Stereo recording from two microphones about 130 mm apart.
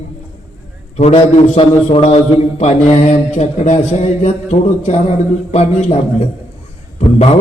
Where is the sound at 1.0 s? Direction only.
55° left (ahead or behind).